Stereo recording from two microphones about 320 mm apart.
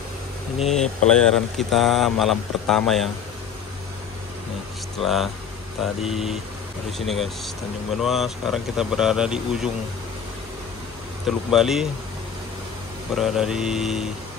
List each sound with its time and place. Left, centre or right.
0.7 s speech: centre
5.0 s speech: centre
11.2 s speech: centre
13.1 s speech: centre